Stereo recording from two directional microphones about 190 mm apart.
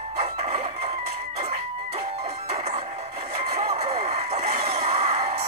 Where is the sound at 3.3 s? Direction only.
35° right (ahead or behind).